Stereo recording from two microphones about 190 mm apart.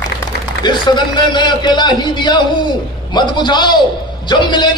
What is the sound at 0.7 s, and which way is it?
A man's voice, 25° left (ahead or behind).